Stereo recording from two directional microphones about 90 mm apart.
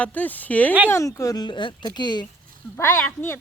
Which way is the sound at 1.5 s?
60° left (ahead or behind).